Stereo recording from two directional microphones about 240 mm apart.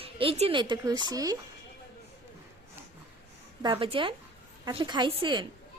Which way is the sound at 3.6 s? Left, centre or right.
Right.